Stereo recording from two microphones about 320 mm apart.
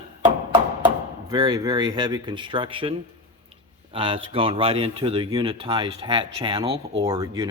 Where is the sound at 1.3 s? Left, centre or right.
Centre.